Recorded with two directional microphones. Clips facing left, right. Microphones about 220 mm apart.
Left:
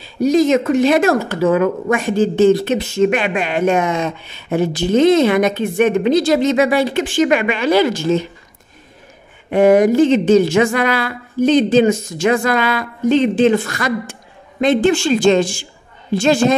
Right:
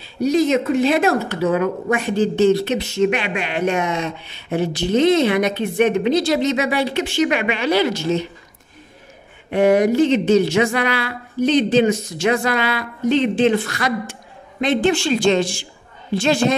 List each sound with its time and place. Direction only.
0.5 s speech: 50° left (ahead or behind)
9.5 s speech: 50° left (ahead or behind)